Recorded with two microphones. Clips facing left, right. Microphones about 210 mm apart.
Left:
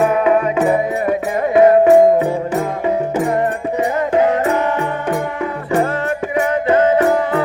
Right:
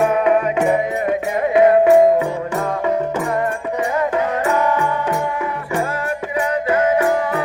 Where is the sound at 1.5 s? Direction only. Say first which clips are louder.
Left 2 dB; 35° left (ahead or behind).